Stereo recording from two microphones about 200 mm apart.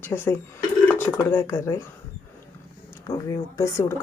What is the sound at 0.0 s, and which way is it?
Speech, 10° left (ahead or behind).